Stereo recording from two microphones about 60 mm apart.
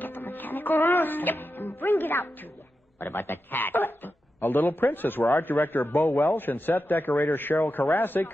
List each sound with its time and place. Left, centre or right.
0.0 s music: left
3.0 s speech: left